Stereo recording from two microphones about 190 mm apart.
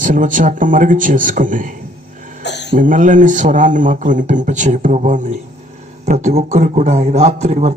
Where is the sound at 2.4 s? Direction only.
65° left (ahead or behind).